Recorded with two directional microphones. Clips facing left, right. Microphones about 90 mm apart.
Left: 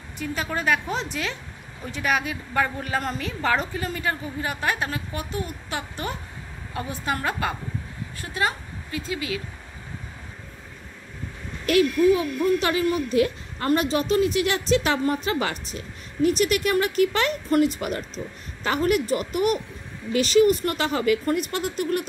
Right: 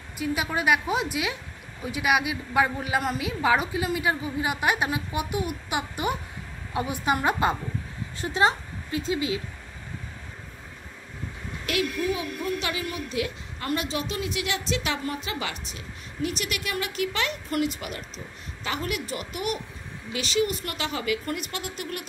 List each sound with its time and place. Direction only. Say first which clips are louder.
0.2 s a woman's voice: right 1 dB; 10° right (ahead or behind)
11.6 s a woman's voice: left 9 dB; 40° left (ahead or behind)